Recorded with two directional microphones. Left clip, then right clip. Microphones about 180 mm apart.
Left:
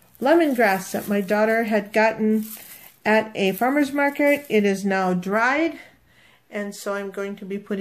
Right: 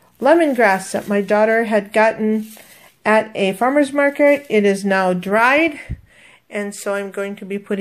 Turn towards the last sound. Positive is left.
turn(degrees=-20)  # may be behind; listen again after turning